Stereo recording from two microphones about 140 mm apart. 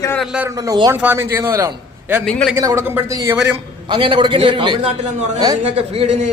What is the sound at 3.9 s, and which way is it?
A man's voice, 35° right (ahead or behind).